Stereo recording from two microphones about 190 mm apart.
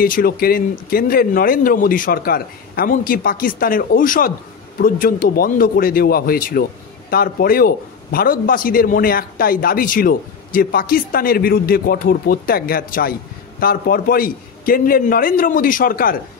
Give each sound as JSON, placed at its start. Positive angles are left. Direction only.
{"t": 0.0, "sound": "a man's voice", "side_deg": 50}